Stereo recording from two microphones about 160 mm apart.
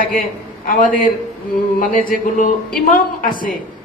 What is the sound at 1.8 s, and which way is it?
A man's voice, 60° left (ahead or behind).